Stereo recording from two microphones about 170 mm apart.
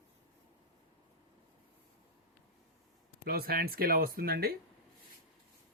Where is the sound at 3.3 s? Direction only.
60° right (ahead or behind).